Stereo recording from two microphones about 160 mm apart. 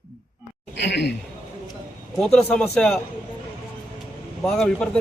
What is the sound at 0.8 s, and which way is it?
Speech, 90° left.